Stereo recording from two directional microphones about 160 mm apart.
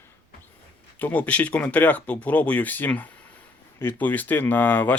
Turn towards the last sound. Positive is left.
turn(degrees=10)  # may be behind; listen again after turning